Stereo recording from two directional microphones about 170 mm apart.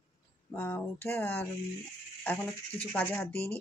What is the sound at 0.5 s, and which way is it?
Speech, 10° left (ahead or behind).